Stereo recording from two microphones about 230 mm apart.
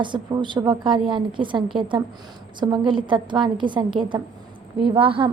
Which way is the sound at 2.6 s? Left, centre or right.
Centre.